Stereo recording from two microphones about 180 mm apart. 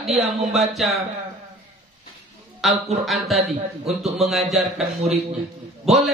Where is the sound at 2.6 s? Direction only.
Centre (ahead or behind).